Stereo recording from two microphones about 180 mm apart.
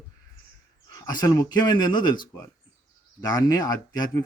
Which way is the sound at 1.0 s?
20° left (ahead or behind).